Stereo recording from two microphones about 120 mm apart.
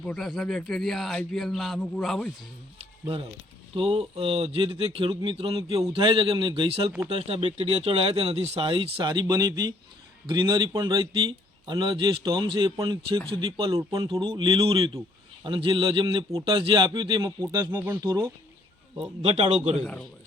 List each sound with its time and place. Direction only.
0.0 s speech: 5° left (ahead or behind)
3.8 s a man's voice: 55° right (ahead or behind); by 13.1 s 35° right (ahead or behind)
13.4 s a man's voice: 50° right (ahead or behind); by 18.0 s 20° right (ahead or behind)
18.0 s a man's voice: 35° right (ahead or behind)
19.2 s a man's voice: 60° right (ahead or behind)